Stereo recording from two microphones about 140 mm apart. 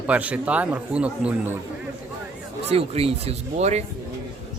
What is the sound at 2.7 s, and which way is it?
Speech, 45° right (ahead or behind).